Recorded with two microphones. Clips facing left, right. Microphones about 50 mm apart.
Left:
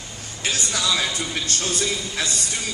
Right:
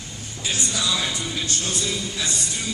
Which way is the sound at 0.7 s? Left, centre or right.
Left.